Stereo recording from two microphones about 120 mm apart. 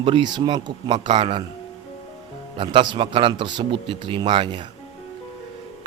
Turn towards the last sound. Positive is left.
turn(degrees=-45)  # may be behind; listen again after turning